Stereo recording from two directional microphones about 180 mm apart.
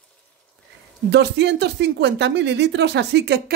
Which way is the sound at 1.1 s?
70° right (ahead or behind).